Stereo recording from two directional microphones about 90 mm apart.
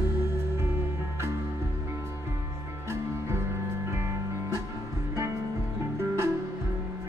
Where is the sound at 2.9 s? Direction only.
30° right (ahead or behind).